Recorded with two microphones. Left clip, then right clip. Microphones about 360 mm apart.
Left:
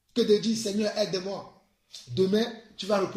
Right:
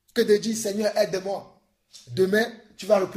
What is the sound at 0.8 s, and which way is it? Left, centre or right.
Speech, centre.